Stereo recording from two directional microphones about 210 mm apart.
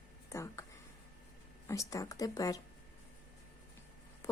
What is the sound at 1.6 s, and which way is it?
Speech, 15° left (ahead or behind).